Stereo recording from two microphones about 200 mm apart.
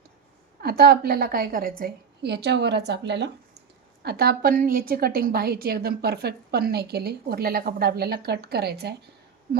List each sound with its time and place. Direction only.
0.6 s a woman's voice: 50° right (ahead or behind)